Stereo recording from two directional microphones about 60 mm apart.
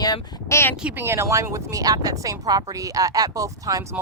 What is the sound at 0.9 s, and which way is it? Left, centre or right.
Speech, right.